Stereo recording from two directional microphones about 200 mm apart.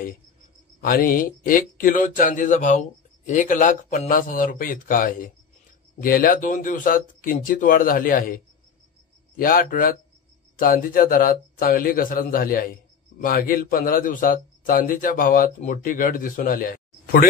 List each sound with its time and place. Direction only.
0.7 s a man's voice: 45° left (ahead or behind)
9.4 s a man's voice: 45° left (ahead or behind)